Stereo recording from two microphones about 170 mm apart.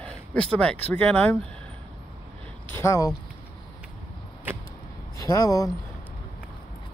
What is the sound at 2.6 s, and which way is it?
Speech, 15° left (ahead or behind).